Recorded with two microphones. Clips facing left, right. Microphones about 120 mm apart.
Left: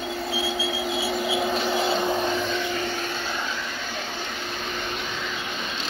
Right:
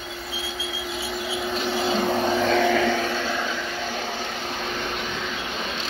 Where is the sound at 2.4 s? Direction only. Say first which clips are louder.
Right 7 dB; 90° right.